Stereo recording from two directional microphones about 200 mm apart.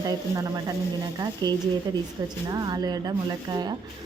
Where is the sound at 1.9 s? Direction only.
20° right (ahead or behind).